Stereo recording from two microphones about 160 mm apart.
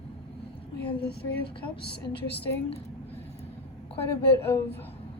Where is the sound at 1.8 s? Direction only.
90° left.